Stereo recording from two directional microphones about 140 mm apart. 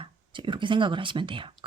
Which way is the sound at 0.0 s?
35° right (ahead or behind).